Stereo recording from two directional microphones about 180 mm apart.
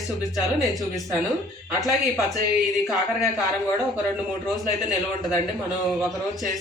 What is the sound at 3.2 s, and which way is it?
Speech, 20° left (ahead or behind).